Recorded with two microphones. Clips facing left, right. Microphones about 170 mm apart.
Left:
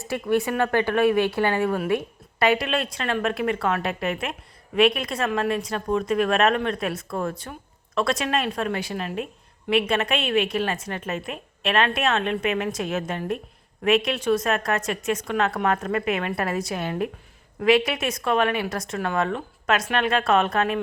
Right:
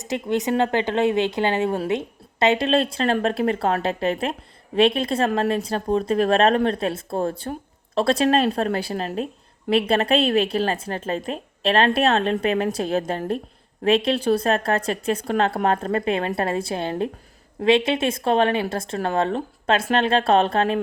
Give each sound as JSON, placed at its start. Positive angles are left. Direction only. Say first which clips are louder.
{"t": 0.0, "sound": "a woman's voice", "louder": "even", "side_deg": -20}